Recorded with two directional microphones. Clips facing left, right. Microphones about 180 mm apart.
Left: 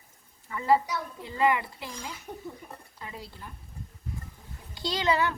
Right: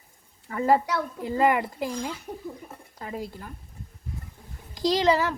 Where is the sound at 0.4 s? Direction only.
40° right (ahead or behind).